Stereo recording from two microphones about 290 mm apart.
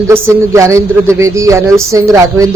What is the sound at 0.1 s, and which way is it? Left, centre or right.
Speech, centre.